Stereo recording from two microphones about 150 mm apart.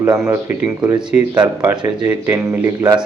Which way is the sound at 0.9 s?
30° right (ahead or behind).